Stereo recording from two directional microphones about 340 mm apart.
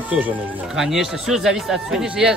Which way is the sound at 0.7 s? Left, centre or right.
Centre.